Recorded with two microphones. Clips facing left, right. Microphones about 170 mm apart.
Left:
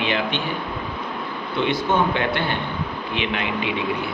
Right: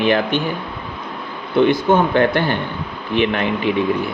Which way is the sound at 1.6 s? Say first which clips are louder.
Right 6 dB; 50° right (ahead or behind).